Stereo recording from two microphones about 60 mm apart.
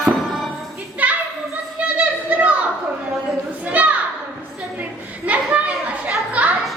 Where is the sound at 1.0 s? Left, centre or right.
Right.